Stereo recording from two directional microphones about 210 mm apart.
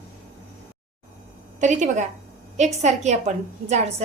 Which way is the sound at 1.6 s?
35° right (ahead or behind).